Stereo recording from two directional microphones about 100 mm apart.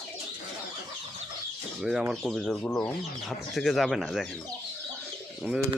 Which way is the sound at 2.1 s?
Centre (ahead or behind).